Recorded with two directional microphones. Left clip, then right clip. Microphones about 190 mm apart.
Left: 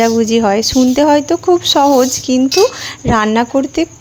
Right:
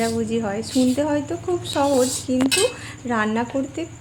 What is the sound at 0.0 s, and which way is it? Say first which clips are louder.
Speech: left 12 dB; 40° left (ahead or behind).